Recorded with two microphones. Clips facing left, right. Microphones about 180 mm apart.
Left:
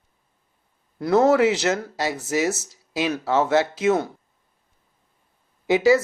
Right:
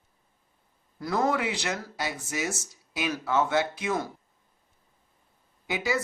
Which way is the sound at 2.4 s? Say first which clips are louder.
Left 8 dB; 90° left.